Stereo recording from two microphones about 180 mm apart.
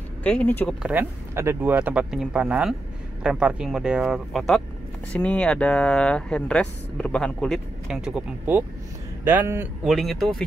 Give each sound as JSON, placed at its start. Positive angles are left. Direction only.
{"t": 0.2, "sound": "speech", "side_deg": 5}
{"t": 0.8, "sound": "speech", "side_deg": -10}
{"t": 9.9, "sound": "speech", "side_deg": 0}